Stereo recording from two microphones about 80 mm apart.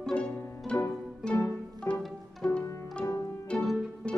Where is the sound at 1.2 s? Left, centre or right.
Centre.